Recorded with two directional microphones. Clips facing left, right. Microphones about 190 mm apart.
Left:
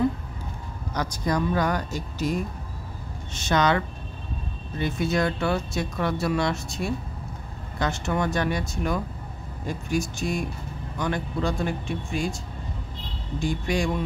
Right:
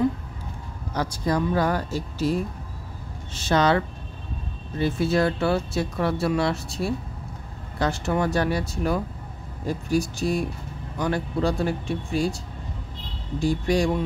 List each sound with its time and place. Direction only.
0.9 s speech: 30° right (ahead or behind)
13.4 s speech: 35° right (ahead or behind)